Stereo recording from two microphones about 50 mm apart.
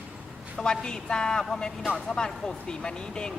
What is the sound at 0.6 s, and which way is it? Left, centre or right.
Speech, centre.